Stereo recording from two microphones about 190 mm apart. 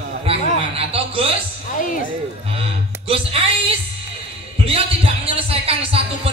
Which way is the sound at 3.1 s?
30° right (ahead or behind).